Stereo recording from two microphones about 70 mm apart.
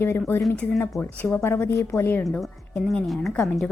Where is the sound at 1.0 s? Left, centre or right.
Left.